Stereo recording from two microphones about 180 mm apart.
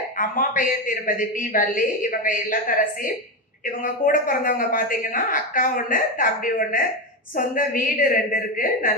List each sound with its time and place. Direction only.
0.2 s speech: 50° left (ahead or behind)